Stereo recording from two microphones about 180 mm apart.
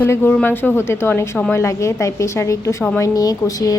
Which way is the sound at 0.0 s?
10° left (ahead or behind).